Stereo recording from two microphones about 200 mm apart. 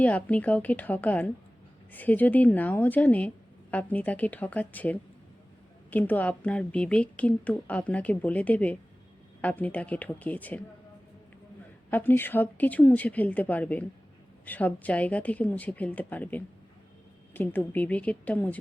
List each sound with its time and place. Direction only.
0.0 s speech: 5° left (ahead or behind)
11.9 s speech: 10° left (ahead or behind)